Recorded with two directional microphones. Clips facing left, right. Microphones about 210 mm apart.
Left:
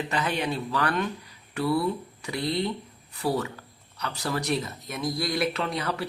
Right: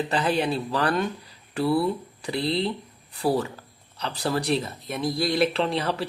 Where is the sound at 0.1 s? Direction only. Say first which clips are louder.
Right 4 dB; 30° right (ahead or behind).